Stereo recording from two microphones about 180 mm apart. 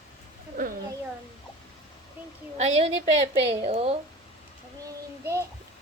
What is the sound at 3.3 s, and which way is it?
Speech, 30° right (ahead or behind).